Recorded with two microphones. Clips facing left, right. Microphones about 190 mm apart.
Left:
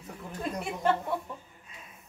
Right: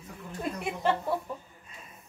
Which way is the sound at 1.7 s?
Centre (ahead or behind).